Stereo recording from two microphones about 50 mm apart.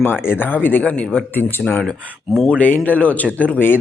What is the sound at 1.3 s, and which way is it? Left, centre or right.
Speech, left.